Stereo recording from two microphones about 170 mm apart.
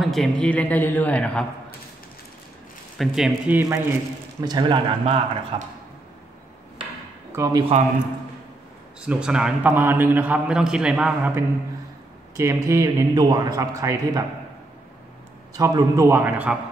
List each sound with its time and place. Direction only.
0.0 s a man's voice: centre (ahead or behind)
3.0 s a man's voice: 5° right (ahead or behind)
4.4 s a man's voice: 25° right (ahead or behind)
7.3 s a man's voice: 20° right (ahead or behind)
9.0 s a man's voice: 5° right (ahead or behind)
15.5 s a man's voice: 20° right (ahead or behind)